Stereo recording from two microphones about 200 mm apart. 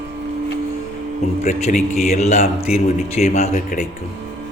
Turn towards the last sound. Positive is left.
turn(degrees=35)  # may be behind; listen again after turning